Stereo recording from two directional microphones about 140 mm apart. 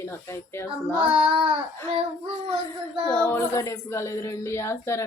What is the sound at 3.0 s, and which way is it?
Child singing, 25° left (ahead or behind).